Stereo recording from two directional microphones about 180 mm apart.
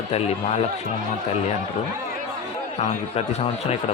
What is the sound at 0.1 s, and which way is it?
Speech, 35° left (ahead or behind).